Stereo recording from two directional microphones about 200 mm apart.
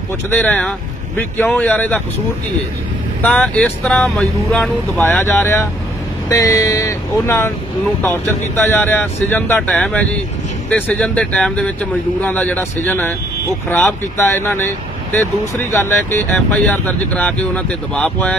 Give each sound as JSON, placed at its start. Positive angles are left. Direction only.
{"t": 0.4, "sound": "speech", "side_deg": 5}
{"t": 3.2, "sound": "speech", "side_deg": 5}